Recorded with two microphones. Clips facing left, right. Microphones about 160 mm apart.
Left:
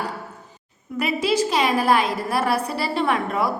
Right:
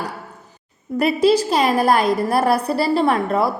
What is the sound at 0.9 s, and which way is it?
A woman's voice, 35° right (ahead or behind).